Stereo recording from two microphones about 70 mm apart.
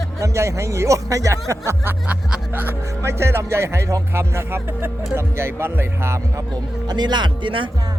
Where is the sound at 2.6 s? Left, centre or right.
Right.